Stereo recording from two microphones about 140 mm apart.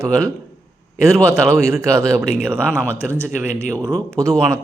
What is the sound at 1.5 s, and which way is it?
Speech, 20° right (ahead or behind).